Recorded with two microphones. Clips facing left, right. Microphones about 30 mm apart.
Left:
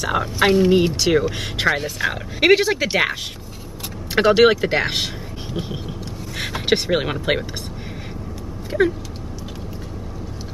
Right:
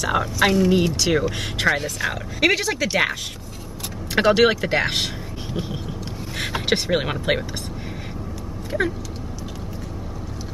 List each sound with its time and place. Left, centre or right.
0.0 s speech: centre
0.9 s speech: centre
4.1 s speech: centre
8.7 s speech: centre